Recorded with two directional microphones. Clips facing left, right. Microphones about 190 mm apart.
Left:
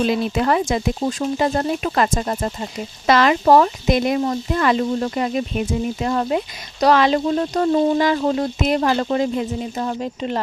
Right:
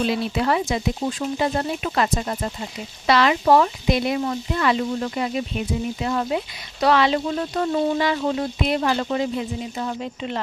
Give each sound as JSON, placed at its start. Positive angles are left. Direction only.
{"t": 0.0, "sound": "speech", "side_deg": 50}